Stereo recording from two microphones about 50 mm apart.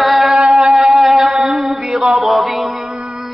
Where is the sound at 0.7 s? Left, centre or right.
Centre.